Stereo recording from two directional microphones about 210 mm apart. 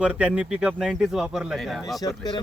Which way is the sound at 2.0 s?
20° left (ahead or behind).